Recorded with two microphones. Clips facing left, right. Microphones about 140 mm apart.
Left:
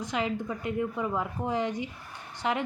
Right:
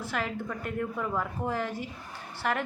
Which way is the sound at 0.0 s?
15° left (ahead or behind).